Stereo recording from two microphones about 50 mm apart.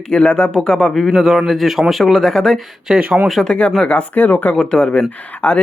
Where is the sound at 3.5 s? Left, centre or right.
Left.